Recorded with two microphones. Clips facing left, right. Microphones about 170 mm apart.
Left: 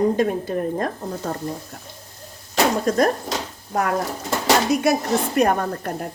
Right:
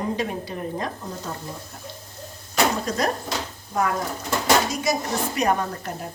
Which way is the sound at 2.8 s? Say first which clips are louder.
Left 6 dB; 50° left (ahead or behind).